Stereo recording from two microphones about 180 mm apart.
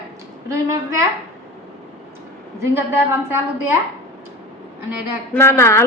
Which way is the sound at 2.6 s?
15° right (ahead or behind).